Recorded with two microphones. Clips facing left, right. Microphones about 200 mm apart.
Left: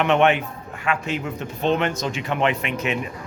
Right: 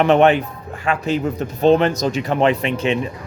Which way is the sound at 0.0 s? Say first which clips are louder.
Right 5 dB; 35° right (ahead or behind).